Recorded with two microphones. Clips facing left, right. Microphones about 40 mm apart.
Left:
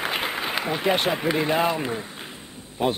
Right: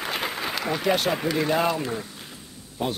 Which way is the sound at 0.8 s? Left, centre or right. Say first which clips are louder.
Left 1 dB; left.